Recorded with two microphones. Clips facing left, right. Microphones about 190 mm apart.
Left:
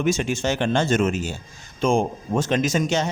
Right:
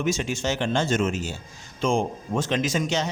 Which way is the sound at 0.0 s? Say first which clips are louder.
Left 3 dB; 55° left (ahead or behind).